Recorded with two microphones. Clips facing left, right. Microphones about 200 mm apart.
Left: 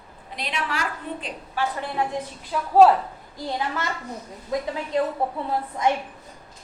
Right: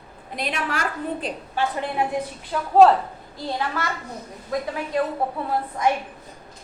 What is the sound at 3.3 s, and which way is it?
A woman's voice, 15° left (ahead or behind).